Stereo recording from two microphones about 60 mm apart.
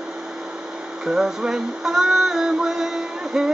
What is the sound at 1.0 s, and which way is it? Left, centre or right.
Music, centre.